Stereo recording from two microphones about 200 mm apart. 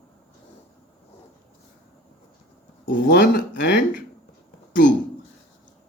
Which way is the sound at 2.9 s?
50° left (ahead or behind).